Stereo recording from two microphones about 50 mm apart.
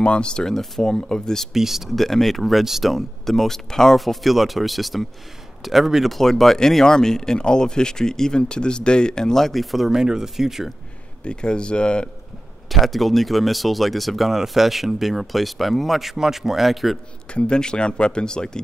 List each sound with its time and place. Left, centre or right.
0.0 s speech: centre
1.5 s speech: centre
2.0 s speech: centre
11.2 s speech: centre
12.6 s speech: centre
17.3 s speech: centre